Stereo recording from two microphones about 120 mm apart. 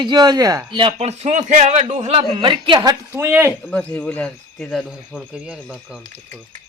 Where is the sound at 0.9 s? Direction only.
65° right (ahead or behind); by 1.8 s 90° right.